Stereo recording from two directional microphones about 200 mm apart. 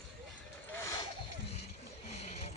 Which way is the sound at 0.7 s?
15° left (ahead or behind).